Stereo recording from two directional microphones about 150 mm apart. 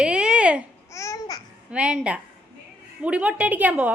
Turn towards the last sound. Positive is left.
turn(degrees=-10)  # may be behind; listen again after turning